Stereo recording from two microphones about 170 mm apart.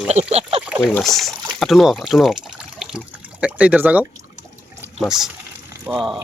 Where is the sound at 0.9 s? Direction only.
Centre (ahead or behind).